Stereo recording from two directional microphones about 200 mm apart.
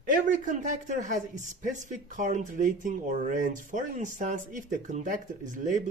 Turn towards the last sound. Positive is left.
turn(degrees=-40)  # may be behind; listen again after turning